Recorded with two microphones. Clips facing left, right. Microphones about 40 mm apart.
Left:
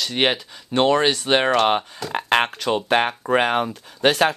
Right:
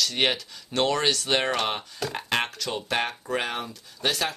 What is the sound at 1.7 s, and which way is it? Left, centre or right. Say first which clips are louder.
Speech: left 8 dB; left.